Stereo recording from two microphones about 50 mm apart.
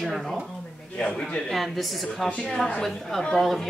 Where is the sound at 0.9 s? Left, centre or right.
Centre.